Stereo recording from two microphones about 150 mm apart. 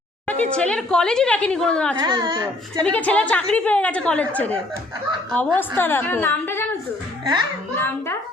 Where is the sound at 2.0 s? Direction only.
30° right (ahead or behind).